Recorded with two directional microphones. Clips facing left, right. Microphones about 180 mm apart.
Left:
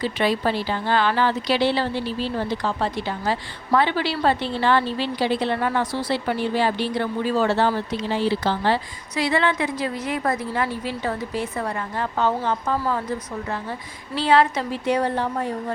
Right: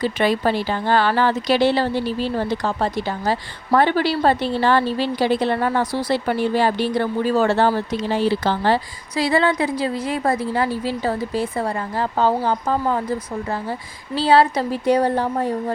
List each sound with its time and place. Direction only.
0.0 s a woman's voice: 50° right (ahead or behind)
9.1 s a woman's voice: 35° right (ahead or behind)